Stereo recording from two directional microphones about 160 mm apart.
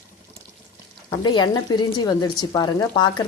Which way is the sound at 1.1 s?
25° left (ahead or behind).